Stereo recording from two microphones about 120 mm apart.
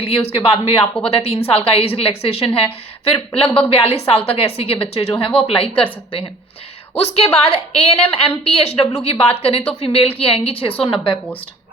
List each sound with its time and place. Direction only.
0.0 s a woman's voice: 55° left (ahead or behind)